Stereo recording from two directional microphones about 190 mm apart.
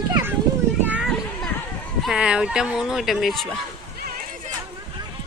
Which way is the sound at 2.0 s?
5° right (ahead or behind).